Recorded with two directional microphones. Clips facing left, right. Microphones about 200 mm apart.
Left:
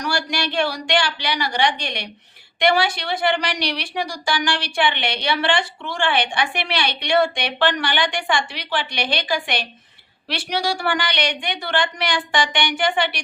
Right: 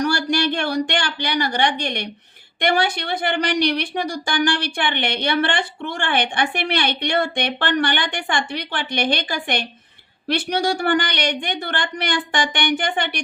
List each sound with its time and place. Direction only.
0.6 s speech: 50° right (ahead or behind)